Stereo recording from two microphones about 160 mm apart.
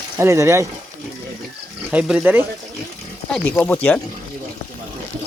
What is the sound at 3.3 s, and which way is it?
Speech, 5° left (ahead or behind).